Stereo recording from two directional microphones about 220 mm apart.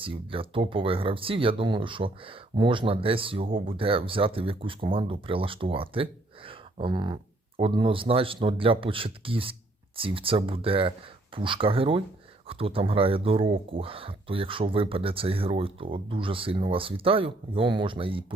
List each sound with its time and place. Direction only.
0.0 s speech: 25° right (ahead or behind)